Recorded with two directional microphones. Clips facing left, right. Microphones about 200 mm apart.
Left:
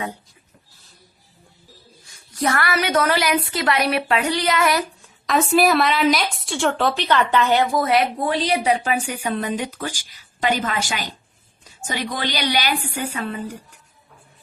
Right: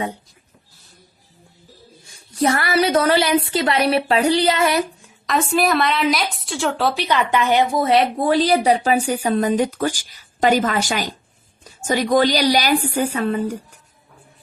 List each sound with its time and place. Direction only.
2.0 s a woman's voice: 25° right (ahead or behind)
5.2 s speech: centre (ahead or behind); by 7.7 s 15° right (ahead or behind)
7.8 s a woman's voice: 25° right (ahead or behind)